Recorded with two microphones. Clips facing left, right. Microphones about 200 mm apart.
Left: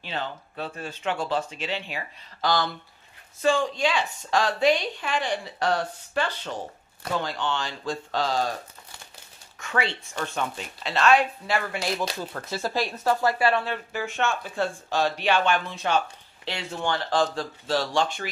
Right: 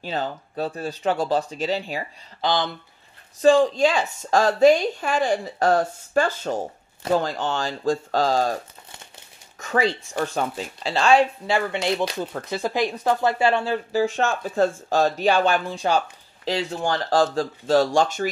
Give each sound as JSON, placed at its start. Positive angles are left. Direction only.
{"t": 0.0, "sound": "speech", "side_deg": -40}
{"t": 2.4, "sound": "speech", "side_deg": -20}
{"t": 3.3, "sound": "a woman's voice", "side_deg": -35}
{"t": 9.6, "sound": "a woman's voice", "side_deg": -40}